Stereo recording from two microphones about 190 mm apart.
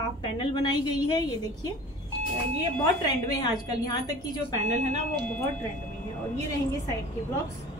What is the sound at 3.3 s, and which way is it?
Speech, 20° left (ahead or behind).